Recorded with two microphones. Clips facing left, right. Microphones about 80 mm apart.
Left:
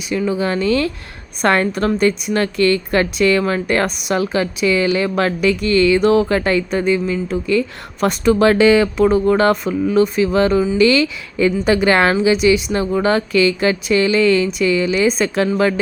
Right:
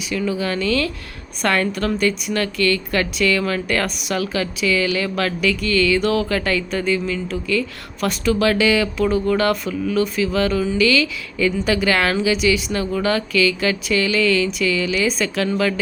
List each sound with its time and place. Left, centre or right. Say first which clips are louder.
0.1 s a woman's voice: left 4 dB; left